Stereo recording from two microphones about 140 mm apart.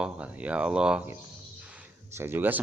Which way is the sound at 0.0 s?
10° right (ahead or behind).